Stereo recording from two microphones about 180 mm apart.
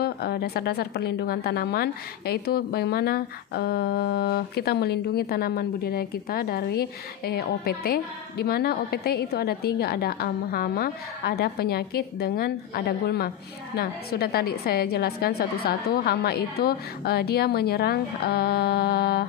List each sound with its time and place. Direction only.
0.0 s a woman's voice: 60° left (ahead or behind)